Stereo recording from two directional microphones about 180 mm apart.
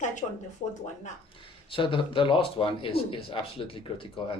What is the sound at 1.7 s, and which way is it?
A man's voice, 30° left (ahead or behind).